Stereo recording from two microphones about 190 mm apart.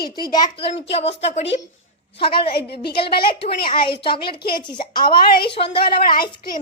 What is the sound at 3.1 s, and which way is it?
A child's voice, 30° left (ahead or behind).